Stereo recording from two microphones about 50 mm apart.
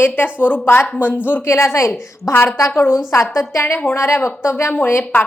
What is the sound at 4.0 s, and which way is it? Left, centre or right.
Speech, left.